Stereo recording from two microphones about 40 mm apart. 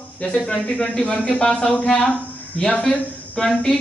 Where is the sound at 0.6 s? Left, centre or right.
Left.